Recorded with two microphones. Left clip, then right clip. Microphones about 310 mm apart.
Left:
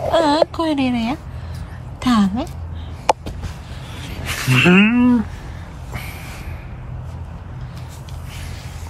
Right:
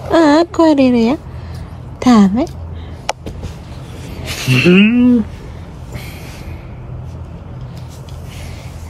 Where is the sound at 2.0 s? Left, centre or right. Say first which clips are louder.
Right 7 dB; right.